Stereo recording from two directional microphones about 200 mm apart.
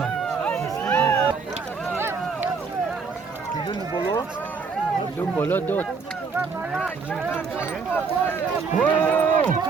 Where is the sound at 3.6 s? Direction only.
25° left (ahead or behind); by 9.2 s 5° left (ahead or behind).